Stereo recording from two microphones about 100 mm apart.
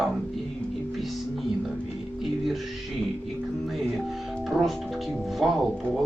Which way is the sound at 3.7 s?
Centre (ahead or behind).